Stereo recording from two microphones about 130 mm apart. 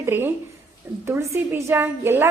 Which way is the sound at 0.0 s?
15° right (ahead or behind).